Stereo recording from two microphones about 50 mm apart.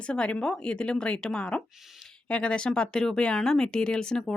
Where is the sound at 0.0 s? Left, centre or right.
Left.